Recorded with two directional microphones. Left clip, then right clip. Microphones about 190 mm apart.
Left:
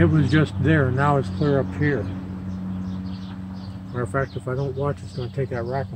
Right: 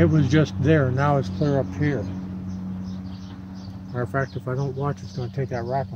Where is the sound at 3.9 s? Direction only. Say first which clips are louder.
Left 1 dB; 40° right (ahead or behind).